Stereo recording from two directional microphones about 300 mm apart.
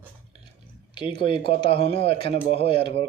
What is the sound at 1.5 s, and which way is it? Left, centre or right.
A man's voice, centre.